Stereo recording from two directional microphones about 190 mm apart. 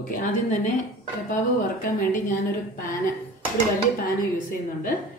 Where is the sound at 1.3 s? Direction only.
45° left (ahead or behind).